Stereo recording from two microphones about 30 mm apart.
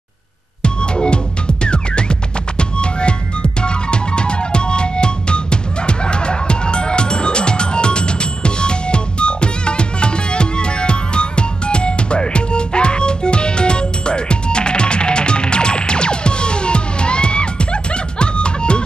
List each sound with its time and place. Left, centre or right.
0.6 s music: left